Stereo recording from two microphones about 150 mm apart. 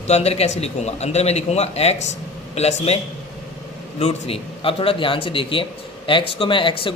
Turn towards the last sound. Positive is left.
turn(degrees=35)  # may be behind; listen again after turning